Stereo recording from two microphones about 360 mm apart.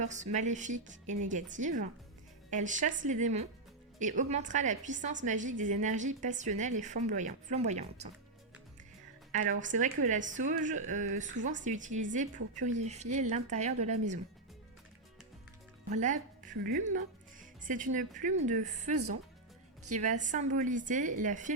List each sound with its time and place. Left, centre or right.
0.0 s a woman's voice: centre
9.3 s a woman's voice: right
15.9 s a woman's voice: centre
18.9 s speech: right
20.0 s a woman's voice: right